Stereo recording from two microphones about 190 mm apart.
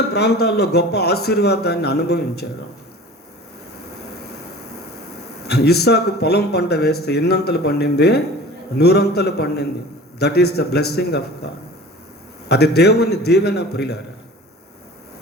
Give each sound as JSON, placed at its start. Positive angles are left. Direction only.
{"t": 0.1, "sound": "a man's voice", "side_deg": 60}
{"t": 5.4, "sound": "a man's voice", "side_deg": 60}